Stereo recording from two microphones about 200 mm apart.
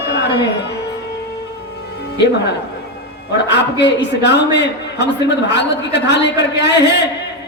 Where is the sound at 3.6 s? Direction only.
60° left (ahead or behind).